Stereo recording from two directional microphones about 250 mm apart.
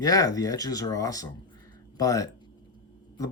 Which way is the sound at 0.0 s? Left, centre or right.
Centre.